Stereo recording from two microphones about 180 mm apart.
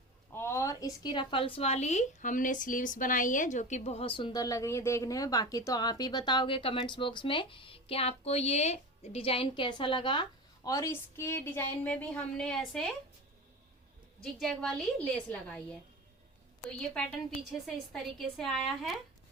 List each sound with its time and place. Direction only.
0.3 s speech: 15° left (ahead or behind)
14.2 s a woman's voice: centre (ahead or behind)
16.6 s a woman's voice: 5° left (ahead or behind)